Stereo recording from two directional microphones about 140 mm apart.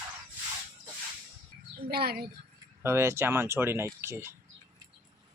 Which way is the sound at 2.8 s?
20° right (ahead or behind).